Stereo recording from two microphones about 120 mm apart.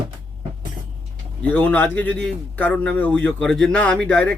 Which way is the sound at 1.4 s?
15° left (ahead or behind).